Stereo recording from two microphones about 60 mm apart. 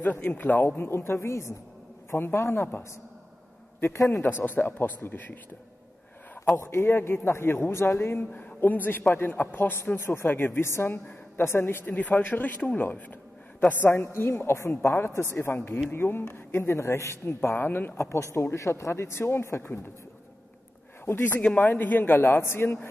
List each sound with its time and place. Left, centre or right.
0.0 s a man's voice: left
4.1 s a man's voice: left
6.5 s a man's voice: left
7.0 s a woman's voice: left
8.3 s a man's voice: left
10.2 s a man's voice: left
13.8 s a woman's voice: left
16.7 s a woman's voice: left
17.9 s a woman's voice: left
21.0 s speech: left
21.5 s a man's voice: left